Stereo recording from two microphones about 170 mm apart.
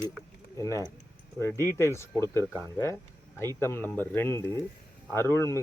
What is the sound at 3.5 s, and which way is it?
Speech, 15° left (ahead or behind).